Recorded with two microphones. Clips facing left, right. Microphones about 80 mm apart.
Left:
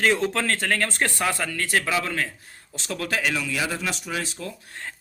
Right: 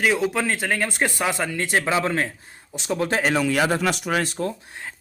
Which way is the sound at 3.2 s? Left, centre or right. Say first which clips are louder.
Right 7 dB; right.